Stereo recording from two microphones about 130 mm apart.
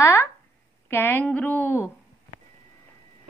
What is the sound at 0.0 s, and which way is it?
A woman's voice, 20° left (ahead or behind).